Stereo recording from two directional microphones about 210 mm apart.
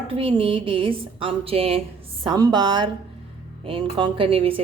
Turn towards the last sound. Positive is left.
turn(degrees=-25)  # may be behind; listen again after turning